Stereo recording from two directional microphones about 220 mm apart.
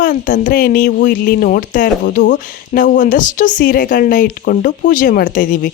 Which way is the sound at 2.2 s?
50° left (ahead or behind).